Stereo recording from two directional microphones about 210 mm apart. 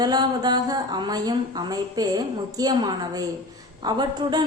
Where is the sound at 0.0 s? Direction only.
20° right (ahead or behind).